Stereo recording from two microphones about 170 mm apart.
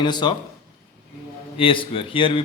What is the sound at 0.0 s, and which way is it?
Speech, 25° left (ahead or behind).